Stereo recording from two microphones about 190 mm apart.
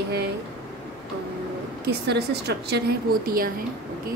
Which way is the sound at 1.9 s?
60° right (ahead or behind).